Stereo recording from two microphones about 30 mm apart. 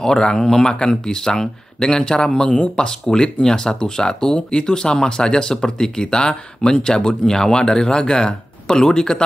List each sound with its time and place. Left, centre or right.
0.0 s speech: left
3.1 s speech: centre